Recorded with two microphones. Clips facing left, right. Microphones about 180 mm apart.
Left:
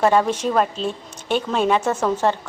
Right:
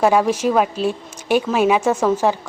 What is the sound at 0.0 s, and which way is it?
Speech, 5° right (ahead or behind).